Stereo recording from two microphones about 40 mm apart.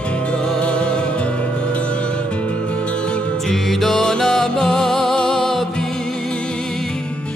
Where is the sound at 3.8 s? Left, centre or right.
Centre.